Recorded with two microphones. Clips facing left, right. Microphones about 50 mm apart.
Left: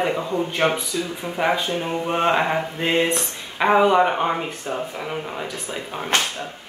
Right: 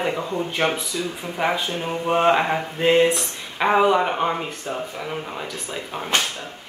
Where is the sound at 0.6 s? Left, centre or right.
Centre.